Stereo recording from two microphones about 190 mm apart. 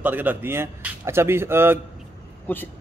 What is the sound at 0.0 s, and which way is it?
Speech, 10° right (ahead or behind).